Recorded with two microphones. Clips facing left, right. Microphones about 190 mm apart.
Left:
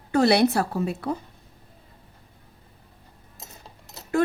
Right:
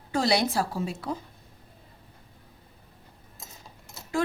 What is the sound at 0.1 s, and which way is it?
A woman's voice, 65° left (ahead or behind).